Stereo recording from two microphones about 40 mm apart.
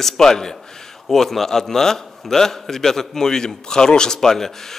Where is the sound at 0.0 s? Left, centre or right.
Centre.